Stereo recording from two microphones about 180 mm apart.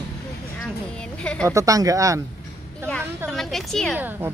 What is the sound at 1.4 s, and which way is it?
Speech, 20° right (ahead or behind).